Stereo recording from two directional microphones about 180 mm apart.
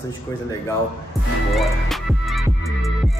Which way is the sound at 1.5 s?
Centre (ahead or behind).